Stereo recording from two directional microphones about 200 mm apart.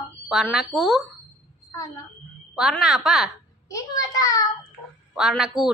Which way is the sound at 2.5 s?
Centre (ahead or behind).